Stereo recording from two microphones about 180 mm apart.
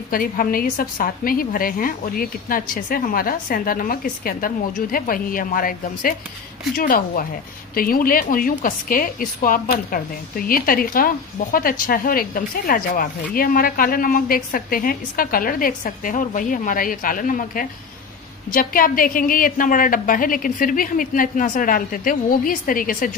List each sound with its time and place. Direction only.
0.1 s a woman's voice: 50° left (ahead or behind)